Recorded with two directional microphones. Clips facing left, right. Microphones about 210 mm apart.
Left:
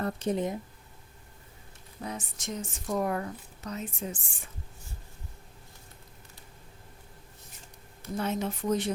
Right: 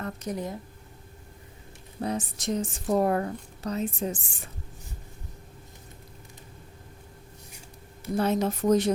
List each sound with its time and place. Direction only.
0.0 s speech: 30° left (ahead or behind)
2.0 s speech: 35° right (ahead or behind)
8.1 s speech: 35° right (ahead or behind)